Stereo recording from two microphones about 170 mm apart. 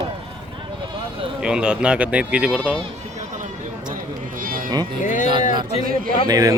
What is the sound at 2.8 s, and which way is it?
Run, 45° right (ahead or behind).